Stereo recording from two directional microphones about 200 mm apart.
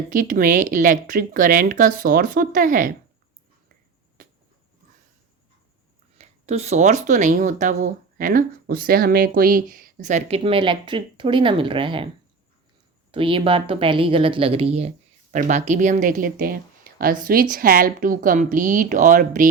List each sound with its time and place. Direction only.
0.1 s speech: 40° right (ahead or behind)
6.1 s speech: 30° right (ahead or behind)
13.1 s a woman's voice: 25° right (ahead or behind); by 19.5 s 40° right (ahead or behind)